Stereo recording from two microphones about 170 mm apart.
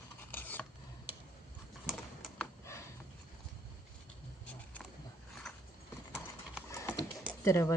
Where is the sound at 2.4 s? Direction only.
15° left (ahead or behind).